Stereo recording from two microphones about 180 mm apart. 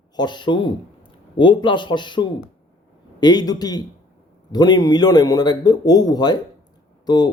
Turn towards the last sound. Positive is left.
turn(degrees=25)  # may be behind; listen again after turning